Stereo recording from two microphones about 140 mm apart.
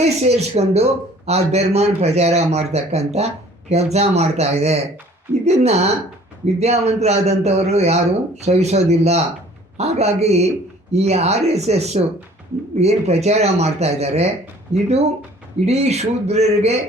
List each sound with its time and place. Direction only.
0.0 s a man's voice: 50° right (ahead or behind)